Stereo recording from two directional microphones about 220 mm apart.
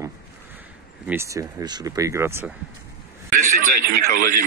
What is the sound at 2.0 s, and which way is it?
Speech, 10° right (ahead or behind).